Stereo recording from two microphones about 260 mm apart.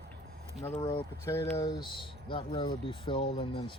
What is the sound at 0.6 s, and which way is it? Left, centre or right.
Speech, centre.